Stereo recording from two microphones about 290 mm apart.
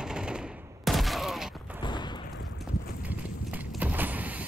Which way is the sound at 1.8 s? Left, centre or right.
Centre.